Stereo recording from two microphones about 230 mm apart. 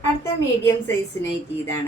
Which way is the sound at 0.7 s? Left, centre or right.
Centre.